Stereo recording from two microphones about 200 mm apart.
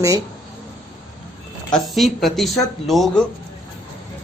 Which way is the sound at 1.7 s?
Centre (ahead or behind).